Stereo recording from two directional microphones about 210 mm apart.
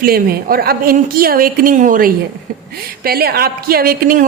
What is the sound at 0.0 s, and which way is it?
A woman's voice, 45° right (ahead or behind).